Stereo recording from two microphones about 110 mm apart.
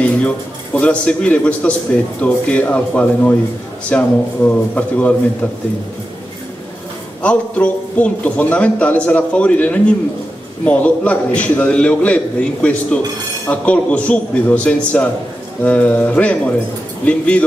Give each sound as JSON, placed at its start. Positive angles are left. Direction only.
{"t": 0.7, "sound": "a man's voice", "side_deg": 10}
{"t": 7.2, "sound": "a man's voice", "side_deg": 10}